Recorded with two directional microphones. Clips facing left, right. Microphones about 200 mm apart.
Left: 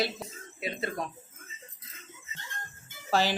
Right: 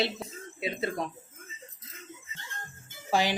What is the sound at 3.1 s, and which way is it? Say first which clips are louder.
Speech: even; 15° right (ahead or behind).